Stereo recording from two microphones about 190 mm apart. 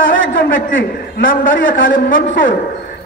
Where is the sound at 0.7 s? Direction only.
80° left.